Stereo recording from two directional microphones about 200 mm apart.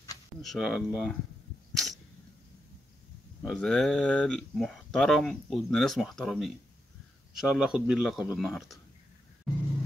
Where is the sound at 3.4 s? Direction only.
5° left (ahead or behind).